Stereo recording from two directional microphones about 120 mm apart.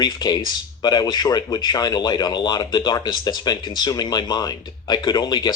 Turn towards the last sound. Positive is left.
turn(degrees=35)  # may be behind; listen again after turning